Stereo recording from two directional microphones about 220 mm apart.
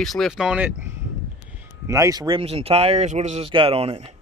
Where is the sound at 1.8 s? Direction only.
15° right (ahead or behind).